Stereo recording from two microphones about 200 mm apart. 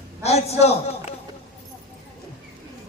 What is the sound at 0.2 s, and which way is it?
Speech, 30° left (ahead or behind).